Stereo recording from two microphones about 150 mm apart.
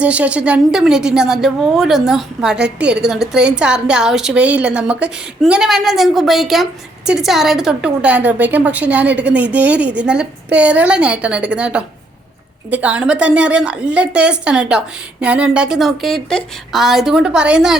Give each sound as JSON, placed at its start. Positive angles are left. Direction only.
{"t": 0.0, "sound": "a woman's voice", "side_deg": -10}